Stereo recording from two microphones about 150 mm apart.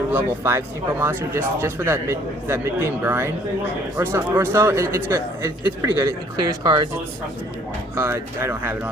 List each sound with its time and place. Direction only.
0.1 s speech: 15° right (ahead or behind)
7.9 s speech: 15° right (ahead or behind)